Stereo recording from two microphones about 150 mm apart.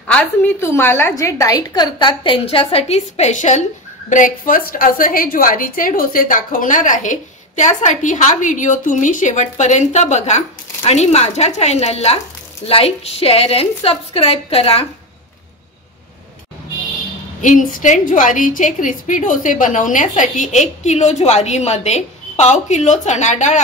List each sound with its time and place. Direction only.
0.1 s a woman's voice: 15° left (ahead or behind); by 3.6 s 50° left (ahead or behind)
4.1 s a woman's voice: 65° left (ahead or behind); by 14.9 s 40° left (ahead or behind)
17.4 s a woman's voice: 60° left (ahead or behind)